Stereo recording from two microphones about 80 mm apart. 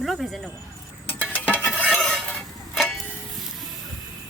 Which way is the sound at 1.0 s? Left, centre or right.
Left.